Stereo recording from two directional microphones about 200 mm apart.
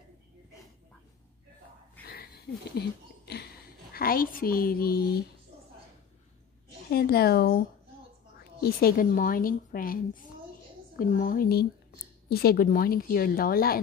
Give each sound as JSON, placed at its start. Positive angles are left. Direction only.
{"t": 3.9, "sound": "a woman's voice", "side_deg": 45}
{"t": 6.9, "sound": "a woman's voice", "side_deg": 50}
{"t": 11.0, "sound": "a woman's voice", "side_deg": 45}